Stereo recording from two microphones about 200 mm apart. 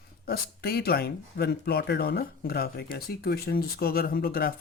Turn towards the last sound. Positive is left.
turn(degrees=50)  # may be behind; listen again after turning